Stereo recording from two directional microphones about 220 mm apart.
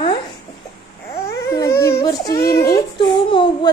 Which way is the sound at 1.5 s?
15° left (ahead or behind).